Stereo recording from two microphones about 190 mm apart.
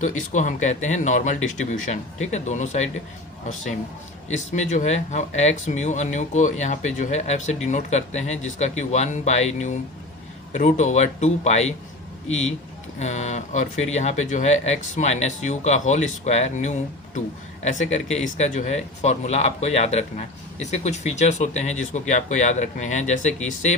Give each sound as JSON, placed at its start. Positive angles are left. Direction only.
{"t": 0.0, "sound": "speech", "side_deg": 40}
{"t": 4.3, "sound": "speech", "side_deg": 40}